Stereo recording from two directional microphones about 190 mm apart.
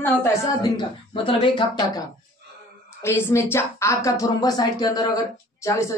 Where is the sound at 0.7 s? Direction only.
25° left (ahead or behind).